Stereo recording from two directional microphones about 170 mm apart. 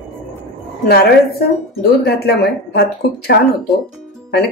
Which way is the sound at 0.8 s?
70° left (ahead or behind).